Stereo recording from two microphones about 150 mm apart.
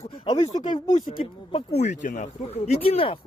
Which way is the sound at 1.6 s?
90° left.